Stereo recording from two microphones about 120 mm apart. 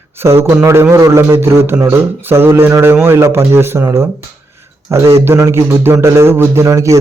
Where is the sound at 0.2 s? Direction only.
20° right (ahead or behind).